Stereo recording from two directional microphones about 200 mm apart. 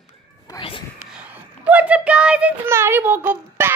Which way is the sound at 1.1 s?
5° right (ahead or behind).